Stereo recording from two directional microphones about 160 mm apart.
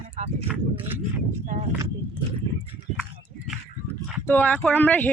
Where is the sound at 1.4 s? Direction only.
50° right (ahead or behind).